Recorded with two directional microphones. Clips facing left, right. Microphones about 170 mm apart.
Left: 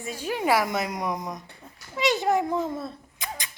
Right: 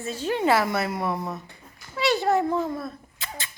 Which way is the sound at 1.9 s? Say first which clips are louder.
Right 1 dB; 20° left (ahead or behind).